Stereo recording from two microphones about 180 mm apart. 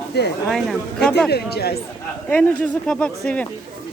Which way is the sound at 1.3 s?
60° left (ahead or behind).